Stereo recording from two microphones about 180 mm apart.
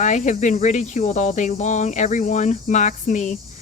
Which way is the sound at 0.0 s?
40° left (ahead or behind).